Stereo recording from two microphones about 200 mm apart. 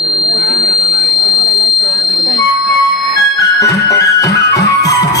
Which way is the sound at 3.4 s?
20° left (ahead or behind).